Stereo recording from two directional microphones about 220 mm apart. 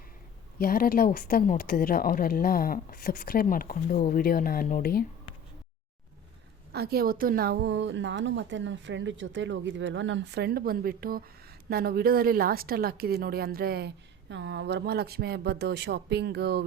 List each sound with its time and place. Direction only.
0.6 s a woman's voice: 40° left (ahead or behind)
6.7 s a woman's voice: 45° right (ahead or behind)